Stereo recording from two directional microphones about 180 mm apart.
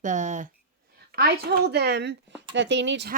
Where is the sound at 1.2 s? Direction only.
65° right (ahead or behind).